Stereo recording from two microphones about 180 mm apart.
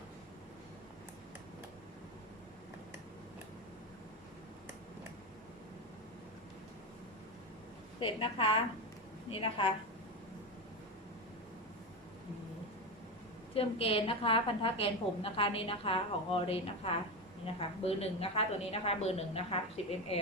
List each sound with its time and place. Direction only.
7.9 s a woman's voice: 30° left (ahead or behind)
13.5 s a woman's voice: 30° left (ahead or behind)